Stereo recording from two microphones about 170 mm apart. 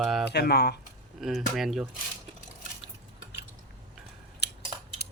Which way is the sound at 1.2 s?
Centre (ahead or behind).